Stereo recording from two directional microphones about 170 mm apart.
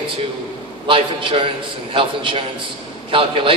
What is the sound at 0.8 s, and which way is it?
A man's voice, 30° right (ahead or behind).